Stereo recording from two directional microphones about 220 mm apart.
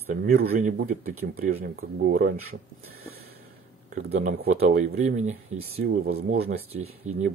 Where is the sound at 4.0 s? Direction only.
35° right (ahead or behind).